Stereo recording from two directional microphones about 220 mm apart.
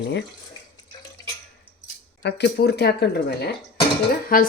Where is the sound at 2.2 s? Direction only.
50° left (ahead or behind).